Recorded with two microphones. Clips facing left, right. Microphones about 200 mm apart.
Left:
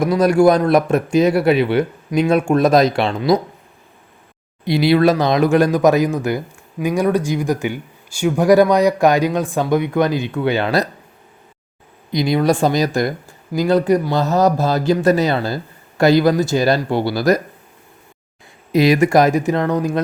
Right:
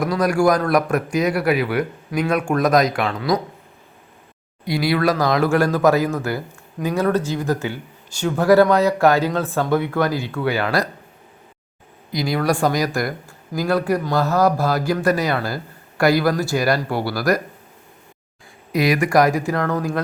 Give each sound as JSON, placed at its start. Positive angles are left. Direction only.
{"t": 0.0, "sound": "speech", "side_deg": 25}
{"t": 4.6, "sound": "speech", "side_deg": 25}
{"t": 12.1, "sound": "speech", "side_deg": 20}
{"t": 18.7, "sound": "speech", "side_deg": 25}